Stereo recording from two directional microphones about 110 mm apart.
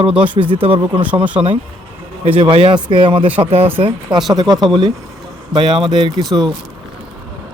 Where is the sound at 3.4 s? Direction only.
65° right (ahead or behind).